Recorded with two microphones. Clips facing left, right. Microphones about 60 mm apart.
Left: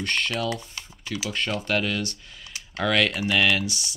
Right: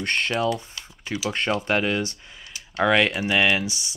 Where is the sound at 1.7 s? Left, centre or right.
Right.